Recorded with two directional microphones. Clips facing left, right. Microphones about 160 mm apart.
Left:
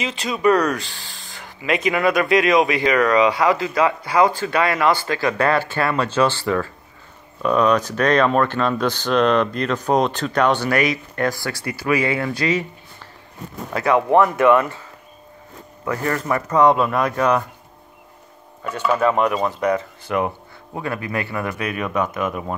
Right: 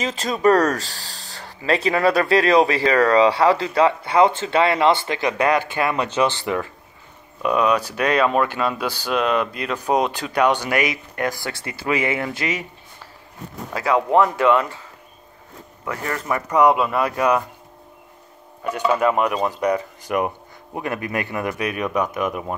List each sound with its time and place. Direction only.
0.0 s speech: 40° right (ahead or behind); by 12.6 s 20° right (ahead or behind)
16.1 s speech: 15° right (ahead or behind)
18.6 s speech: 15° right (ahead or behind)